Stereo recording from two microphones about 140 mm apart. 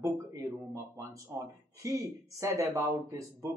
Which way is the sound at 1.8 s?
25° right (ahead or behind).